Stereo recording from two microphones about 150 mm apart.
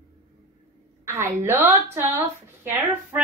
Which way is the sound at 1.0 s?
20° right (ahead or behind).